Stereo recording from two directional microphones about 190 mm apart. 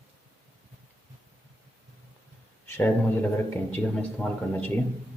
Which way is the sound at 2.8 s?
10° left (ahead or behind).